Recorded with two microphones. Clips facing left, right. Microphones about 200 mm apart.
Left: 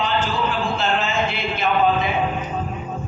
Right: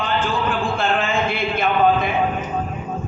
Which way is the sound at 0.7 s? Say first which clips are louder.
Right 1 dB; 55° right (ahead or behind).